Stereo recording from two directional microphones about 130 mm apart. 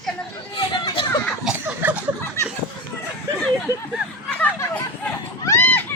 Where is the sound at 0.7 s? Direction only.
40° left (ahead or behind).